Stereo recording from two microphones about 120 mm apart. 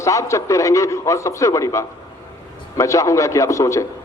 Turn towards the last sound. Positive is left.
turn(degrees=25)  # may be behind; listen again after turning